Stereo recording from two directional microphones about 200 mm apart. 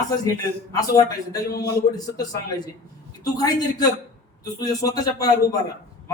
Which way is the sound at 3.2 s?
20° left (ahead or behind).